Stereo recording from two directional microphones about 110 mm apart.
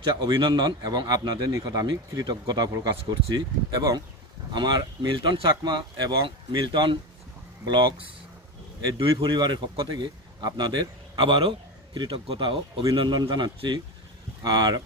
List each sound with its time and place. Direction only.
0.0 s a man's voice: 45° right (ahead or behind)
9.1 s a man's voice: 40° right (ahead or behind)